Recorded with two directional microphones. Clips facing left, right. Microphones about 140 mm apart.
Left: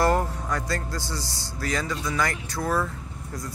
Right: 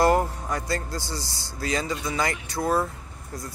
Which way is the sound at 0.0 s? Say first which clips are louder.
Right 2 dB; 15° right (ahead or behind).